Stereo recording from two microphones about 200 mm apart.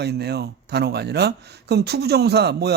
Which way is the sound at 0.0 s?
55° right (ahead or behind).